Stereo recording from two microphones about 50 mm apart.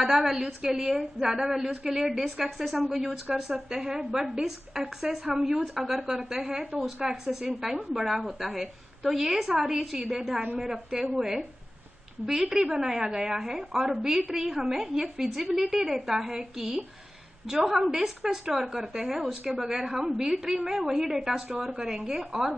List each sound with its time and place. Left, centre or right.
0.0 s a woman's voice: centre
7.9 s a woman's voice: centre
9.9 s a woman's voice: centre